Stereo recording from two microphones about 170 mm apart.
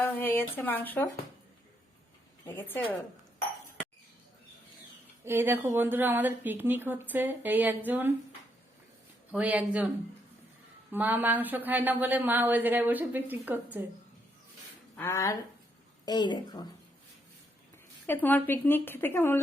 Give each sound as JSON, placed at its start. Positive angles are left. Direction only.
{"t": 0.0, "sound": "a woman's voice", "side_deg": 10}
{"t": 2.5, "sound": "dishes", "side_deg": 10}
{"t": 5.2, "sound": "speech", "side_deg": -15}
{"t": 9.3, "sound": "speech", "side_deg": -10}
{"t": 10.9, "sound": "speech", "side_deg": -10}
{"t": 14.9, "sound": "a woman's voice", "side_deg": 15}
{"t": 18.0, "sound": "a woman's voice", "side_deg": 10}